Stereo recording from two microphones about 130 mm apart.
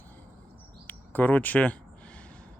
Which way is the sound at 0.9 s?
15° left (ahead or behind).